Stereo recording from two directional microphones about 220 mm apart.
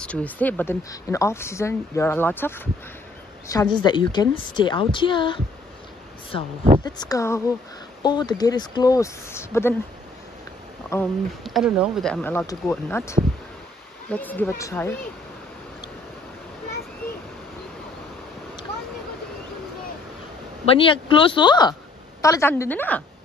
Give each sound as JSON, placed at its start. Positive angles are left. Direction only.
{"t": 0.0, "sound": "a woman's voice", "side_deg": 5}
{"t": 6.8, "sound": "speech", "side_deg": 20}
{"t": 10.9, "sound": "speech", "side_deg": 10}
{"t": 11.4, "sound": "speech", "side_deg": 0}
{"t": 20.8, "sound": "a woman's voice", "side_deg": 25}